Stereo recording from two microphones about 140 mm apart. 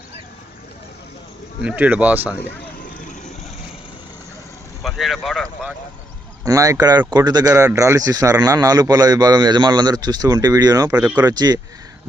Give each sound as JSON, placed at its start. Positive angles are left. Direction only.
{"t": 1.6, "sound": "speech", "side_deg": -10}
{"t": 4.8, "sound": "speech", "side_deg": 0}
{"t": 6.4, "sound": "a man's voice", "side_deg": -25}
{"t": 10.9, "sound": "speech", "side_deg": -10}
{"t": 11.2, "sound": "a man's voice", "side_deg": -25}